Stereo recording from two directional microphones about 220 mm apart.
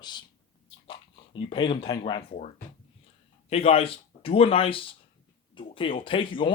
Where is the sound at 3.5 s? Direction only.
25° left (ahead or behind).